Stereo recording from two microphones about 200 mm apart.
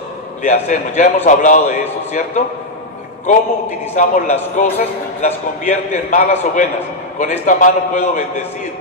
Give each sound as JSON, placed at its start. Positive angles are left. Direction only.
{"t": 0.4, "sound": "a man's voice", "side_deg": 35}
{"t": 3.9, "sound": "a man's voice", "side_deg": 40}